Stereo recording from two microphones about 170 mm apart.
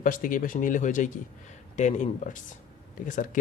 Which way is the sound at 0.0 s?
55° left (ahead or behind).